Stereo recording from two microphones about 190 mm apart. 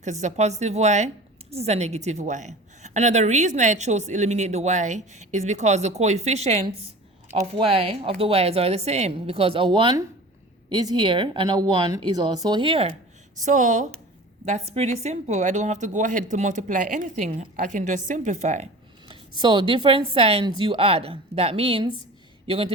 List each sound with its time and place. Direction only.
0.0 s a woman's voice: 40° right (ahead or behind)
13.4 s a woman's voice: 40° right (ahead or behind)